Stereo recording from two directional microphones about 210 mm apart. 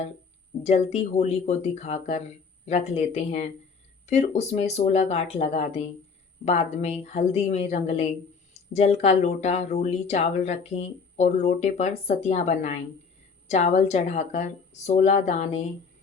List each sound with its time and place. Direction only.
0.6 s speech: 30° left (ahead or behind)